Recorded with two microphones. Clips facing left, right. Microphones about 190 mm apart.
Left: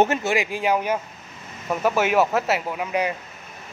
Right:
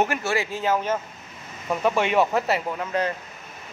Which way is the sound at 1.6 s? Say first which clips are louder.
Left 1 dB; 5° left (ahead or behind).